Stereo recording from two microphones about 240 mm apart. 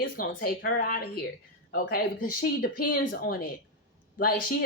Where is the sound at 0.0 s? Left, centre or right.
Left.